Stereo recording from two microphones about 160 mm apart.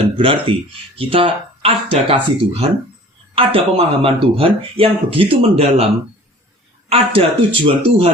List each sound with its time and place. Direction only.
0.2 s speech: 35° right (ahead or behind)
6.9 s speech: 35° right (ahead or behind)